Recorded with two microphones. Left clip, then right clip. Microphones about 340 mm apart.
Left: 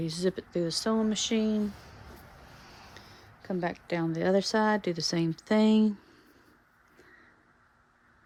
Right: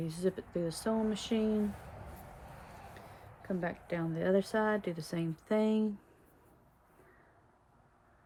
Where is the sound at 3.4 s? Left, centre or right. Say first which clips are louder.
Left 5 dB; left.